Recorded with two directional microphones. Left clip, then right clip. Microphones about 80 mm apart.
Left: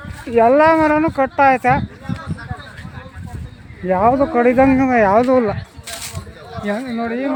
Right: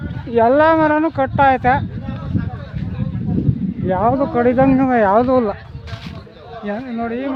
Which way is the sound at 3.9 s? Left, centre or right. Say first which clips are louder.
Left 2 dB; centre.